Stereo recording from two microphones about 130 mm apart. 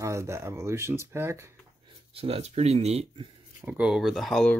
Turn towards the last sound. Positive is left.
turn(degrees=5)  # may be behind; listen again after turning